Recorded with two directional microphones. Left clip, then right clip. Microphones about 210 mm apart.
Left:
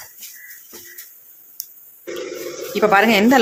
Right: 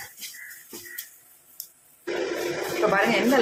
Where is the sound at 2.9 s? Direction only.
50° left (ahead or behind).